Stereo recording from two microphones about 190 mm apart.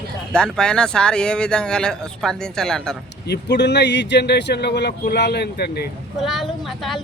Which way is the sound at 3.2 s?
60° left (ahead or behind).